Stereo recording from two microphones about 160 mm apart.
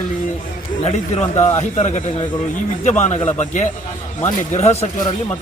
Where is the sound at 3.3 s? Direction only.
50° left (ahead or behind).